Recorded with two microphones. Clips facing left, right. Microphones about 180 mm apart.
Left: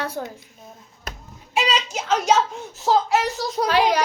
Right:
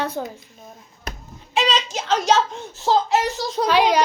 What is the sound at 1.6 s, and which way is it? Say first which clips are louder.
A child's voice: right 1 dB; 10° left (ahead or behind).